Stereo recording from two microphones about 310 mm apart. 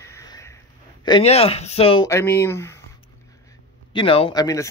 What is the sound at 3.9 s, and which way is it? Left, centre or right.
Speech, centre.